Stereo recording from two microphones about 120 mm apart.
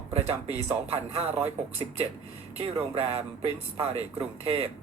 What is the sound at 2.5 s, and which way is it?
Speech, 60° right (ahead or behind).